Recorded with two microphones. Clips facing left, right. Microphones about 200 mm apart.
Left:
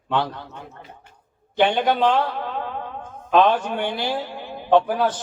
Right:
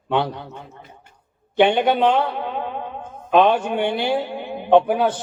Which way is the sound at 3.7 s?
55° right (ahead or behind).